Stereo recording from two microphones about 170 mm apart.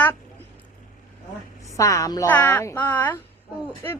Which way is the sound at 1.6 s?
20° left (ahead or behind).